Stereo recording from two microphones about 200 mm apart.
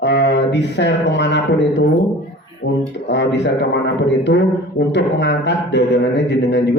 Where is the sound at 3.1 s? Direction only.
60° left (ahead or behind).